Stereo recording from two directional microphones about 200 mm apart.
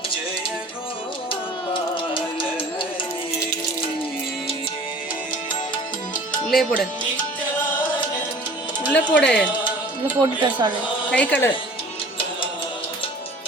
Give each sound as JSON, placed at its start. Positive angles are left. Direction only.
{"t": 1.3, "sound": "music", "side_deg": 25}
{"t": 6.5, "sound": "speech", "side_deg": 0}
{"t": 8.9, "sound": "speech", "side_deg": 5}
{"t": 10.2, "sound": "speech", "side_deg": -20}
{"t": 11.1, "sound": "speech", "side_deg": 5}